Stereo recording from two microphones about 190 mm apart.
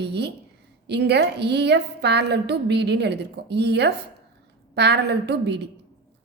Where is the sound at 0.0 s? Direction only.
60° right (ahead or behind).